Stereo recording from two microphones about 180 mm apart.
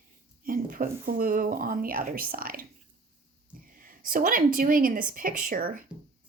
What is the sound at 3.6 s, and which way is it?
Speech, 50° right (ahead or behind).